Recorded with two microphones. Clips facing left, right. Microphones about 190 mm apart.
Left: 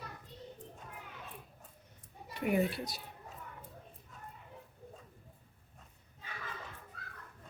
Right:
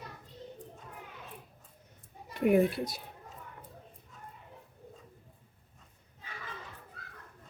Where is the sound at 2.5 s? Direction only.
55° right (ahead or behind).